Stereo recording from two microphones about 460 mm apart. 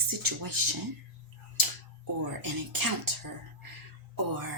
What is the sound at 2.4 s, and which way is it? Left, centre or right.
Speech, right.